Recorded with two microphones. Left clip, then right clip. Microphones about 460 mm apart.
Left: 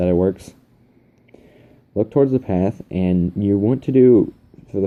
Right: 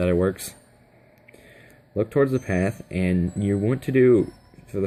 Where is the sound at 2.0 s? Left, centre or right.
Right.